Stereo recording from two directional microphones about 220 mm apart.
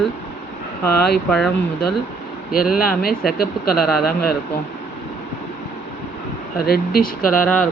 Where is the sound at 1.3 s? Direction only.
5° left (ahead or behind).